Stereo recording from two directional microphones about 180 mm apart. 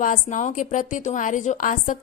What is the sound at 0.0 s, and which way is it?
A woman's voice, 45° left (ahead or behind).